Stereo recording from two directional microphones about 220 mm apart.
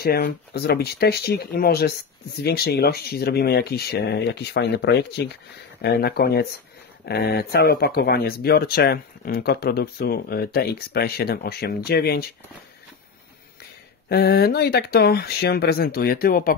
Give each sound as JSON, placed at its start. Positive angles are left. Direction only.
{"t": 0.0, "sound": "speech", "side_deg": 45}
{"t": 14.0, "sound": "speech", "side_deg": 45}